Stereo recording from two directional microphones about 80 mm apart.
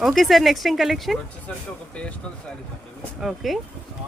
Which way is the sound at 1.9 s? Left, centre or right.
Centre.